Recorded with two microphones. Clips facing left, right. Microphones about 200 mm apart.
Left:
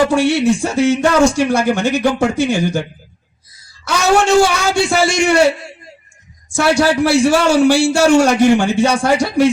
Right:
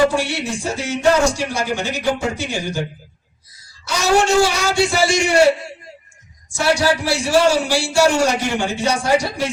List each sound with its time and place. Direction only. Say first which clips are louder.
0.1 s a man's voice: left 9 dB; 55° left (ahead or behind)
3.8 s a man's voice: left 3 dB; 55° left (ahead or behind)
6.5 s a man's voice: left 4 dB; 55° left (ahead or behind)